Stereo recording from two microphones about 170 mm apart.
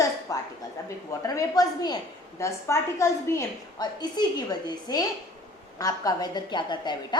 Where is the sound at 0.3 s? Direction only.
20° left (ahead or behind).